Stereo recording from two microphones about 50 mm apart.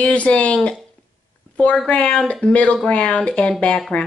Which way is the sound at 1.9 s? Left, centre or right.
Left.